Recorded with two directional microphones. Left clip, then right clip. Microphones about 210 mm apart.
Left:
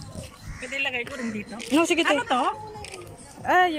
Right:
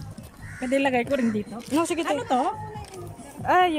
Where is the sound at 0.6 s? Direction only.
60° right (ahead or behind).